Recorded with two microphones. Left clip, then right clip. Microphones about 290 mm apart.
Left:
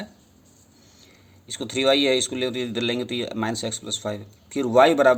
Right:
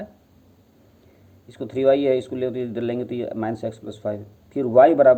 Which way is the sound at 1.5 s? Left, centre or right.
Left.